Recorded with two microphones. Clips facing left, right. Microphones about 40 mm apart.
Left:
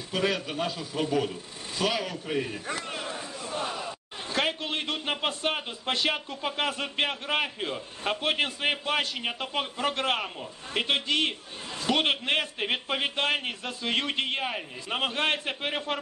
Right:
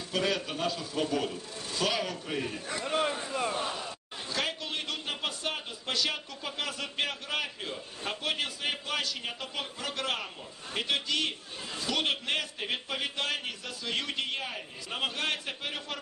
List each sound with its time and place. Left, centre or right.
0.1 s a man's voice: centre
3.0 s a sound: right
4.3 s a man's voice: left